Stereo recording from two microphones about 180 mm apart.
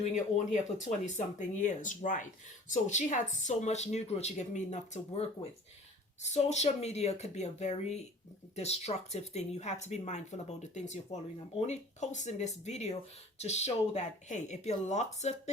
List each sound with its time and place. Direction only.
0.0 s speech: 40° left (ahead or behind)